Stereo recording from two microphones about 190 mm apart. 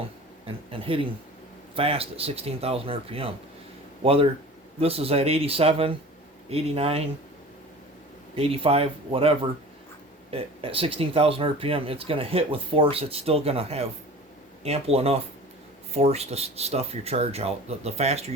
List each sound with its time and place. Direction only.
0.4 s speech: 30° right (ahead or behind)
8.4 s speech: 30° right (ahead or behind)